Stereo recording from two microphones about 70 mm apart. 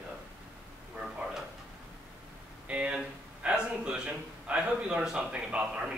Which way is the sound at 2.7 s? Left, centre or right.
Centre.